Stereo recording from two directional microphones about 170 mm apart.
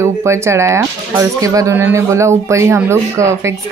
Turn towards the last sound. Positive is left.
turn(degrees=-15)  # may be behind; listen again after turning